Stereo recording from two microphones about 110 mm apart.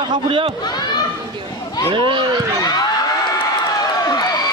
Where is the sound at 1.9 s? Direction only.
50° right (ahead or behind).